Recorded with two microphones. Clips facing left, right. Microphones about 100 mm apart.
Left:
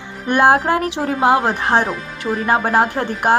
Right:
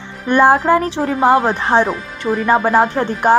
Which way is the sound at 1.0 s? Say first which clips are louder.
Right 2 dB; 5° left (ahead or behind).